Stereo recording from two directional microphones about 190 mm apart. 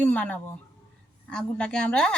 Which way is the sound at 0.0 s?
5° left (ahead or behind).